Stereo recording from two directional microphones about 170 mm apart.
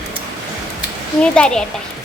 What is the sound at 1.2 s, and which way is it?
Speech, 5° left (ahead or behind).